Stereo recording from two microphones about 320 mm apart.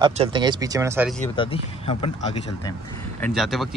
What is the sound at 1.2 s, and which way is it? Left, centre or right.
Speech, centre.